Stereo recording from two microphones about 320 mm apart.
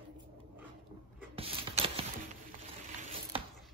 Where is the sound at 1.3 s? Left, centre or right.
Centre.